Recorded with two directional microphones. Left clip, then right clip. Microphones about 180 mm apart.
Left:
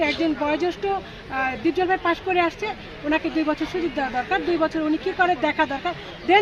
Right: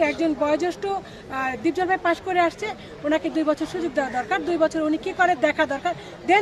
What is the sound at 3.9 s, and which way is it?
Speech, 30° right (ahead or behind).